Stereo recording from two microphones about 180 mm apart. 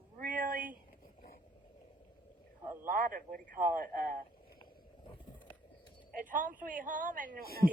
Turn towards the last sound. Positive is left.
turn(degrees=-50)  # may be behind; listen again after turning